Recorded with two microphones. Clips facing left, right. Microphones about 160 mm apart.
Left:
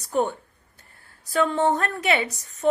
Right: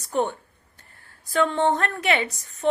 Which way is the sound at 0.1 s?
5° left (ahead or behind).